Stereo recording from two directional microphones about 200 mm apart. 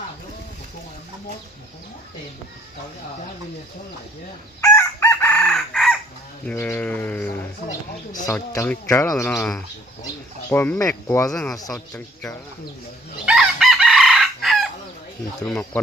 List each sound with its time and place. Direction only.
4.6 s chicken: 15° left (ahead or behind)
6.4 s speech: 10° left (ahead or behind)
7.7 s speech: 40° left (ahead or behind)
8.3 s speech: 10° left (ahead or behind)
13.2 s chicken: 5° right (ahead or behind)
15.4 s speech: 5° left (ahead or behind)